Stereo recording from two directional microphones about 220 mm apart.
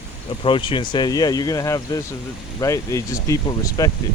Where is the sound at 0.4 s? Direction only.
20° left (ahead or behind).